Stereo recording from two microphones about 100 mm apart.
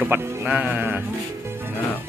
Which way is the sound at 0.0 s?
15° right (ahead or behind).